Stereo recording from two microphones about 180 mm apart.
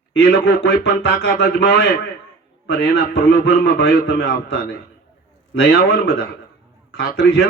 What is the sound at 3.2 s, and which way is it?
A man's voice, 65° left (ahead or behind).